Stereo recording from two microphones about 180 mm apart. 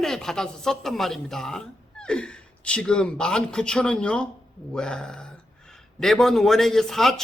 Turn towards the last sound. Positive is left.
turn(degrees=0)  # may be behind; listen again after turning